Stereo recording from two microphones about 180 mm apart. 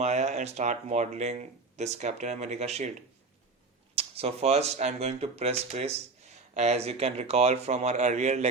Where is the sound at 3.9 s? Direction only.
35° right (ahead or behind).